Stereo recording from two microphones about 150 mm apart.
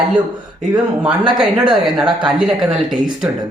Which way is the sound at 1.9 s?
5° right (ahead or behind).